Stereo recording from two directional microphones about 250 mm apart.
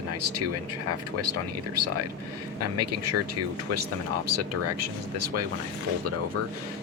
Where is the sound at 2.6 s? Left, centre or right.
Right.